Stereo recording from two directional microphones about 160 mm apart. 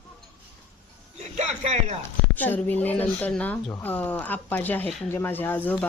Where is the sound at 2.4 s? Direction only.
10° left (ahead or behind).